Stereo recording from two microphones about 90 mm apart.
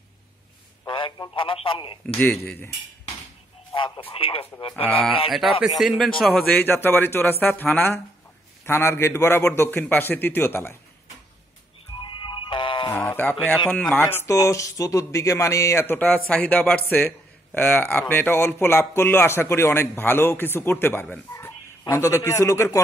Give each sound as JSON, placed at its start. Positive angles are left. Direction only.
{"t": 0.8, "sound": "a sound", "side_deg": 65}
{"t": 1.3, "sound": "speech", "side_deg": 75}
{"t": 3.7, "sound": "radio", "side_deg": 65}
{"t": 4.1, "sound": "speech", "side_deg": 90}
{"t": 5.3, "sound": "speech", "side_deg": 0}
{"t": 6.5, "sound": "a man's voice", "side_deg": 20}
{"t": 8.6, "sound": "a man's voice", "side_deg": 30}
{"t": 12.0, "sound": "music", "side_deg": 65}
{"t": 13.2, "sound": "speech", "side_deg": 15}
{"t": 14.0, "sound": "speech", "side_deg": 30}
{"t": 16.0, "sound": "a man's voice", "side_deg": 15}